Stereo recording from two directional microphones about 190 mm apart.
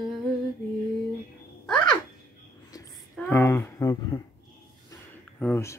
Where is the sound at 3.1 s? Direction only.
10° left (ahead or behind).